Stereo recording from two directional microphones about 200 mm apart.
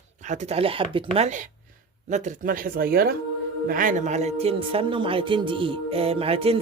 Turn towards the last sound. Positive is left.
turn(degrees=-30)  # may be behind; listen again after turning